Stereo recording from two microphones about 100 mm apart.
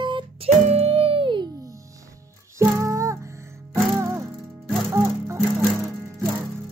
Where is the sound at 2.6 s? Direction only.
30° right (ahead or behind).